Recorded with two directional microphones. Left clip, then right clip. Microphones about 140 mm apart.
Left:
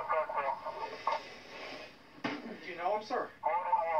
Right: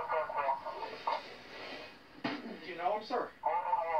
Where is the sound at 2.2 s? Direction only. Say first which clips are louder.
Even; 15° right (ahead or behind).